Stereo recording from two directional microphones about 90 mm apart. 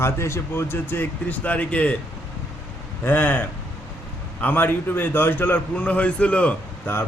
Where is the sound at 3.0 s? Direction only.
20° left (ahead or behind).